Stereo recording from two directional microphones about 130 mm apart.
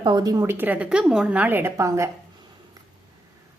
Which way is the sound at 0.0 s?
35° right (ahead or behind).